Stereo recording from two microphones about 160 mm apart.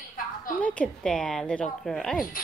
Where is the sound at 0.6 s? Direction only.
10° left (ahead or behind).